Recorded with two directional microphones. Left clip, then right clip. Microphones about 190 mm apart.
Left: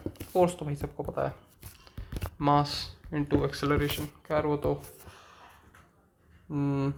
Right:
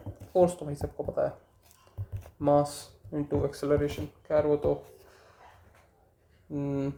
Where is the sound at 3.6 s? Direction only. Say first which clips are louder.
Right 1 dB; 25° left (ahead or behind).